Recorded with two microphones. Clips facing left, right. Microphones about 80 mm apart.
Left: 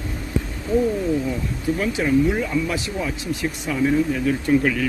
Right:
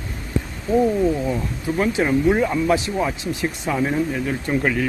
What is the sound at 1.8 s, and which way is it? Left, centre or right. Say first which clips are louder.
Speech: right 1 dB; right.